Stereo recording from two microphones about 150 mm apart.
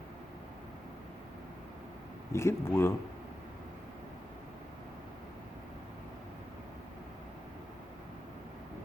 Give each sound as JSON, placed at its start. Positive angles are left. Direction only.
{"t": 2.3, "sound": "speech", "side_deg": 15}